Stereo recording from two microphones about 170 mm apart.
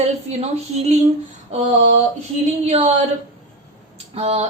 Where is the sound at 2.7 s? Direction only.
45° right (ahead or behind).